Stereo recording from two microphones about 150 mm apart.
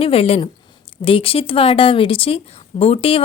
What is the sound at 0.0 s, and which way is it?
A woman's voice, 40° left (ahead or behind).